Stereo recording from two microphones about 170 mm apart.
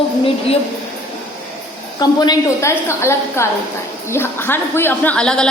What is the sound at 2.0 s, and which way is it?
A woman's voice, 25° left (ahead or behind).